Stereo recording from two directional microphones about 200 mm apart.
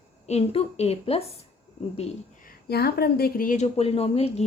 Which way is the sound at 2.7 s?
50° left (ahead or behind).